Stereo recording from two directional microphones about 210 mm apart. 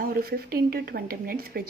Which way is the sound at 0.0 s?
45° right (ahead or behind).